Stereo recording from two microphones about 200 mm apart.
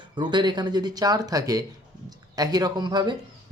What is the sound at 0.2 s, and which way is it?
Speech, 20° right (ahead or behind).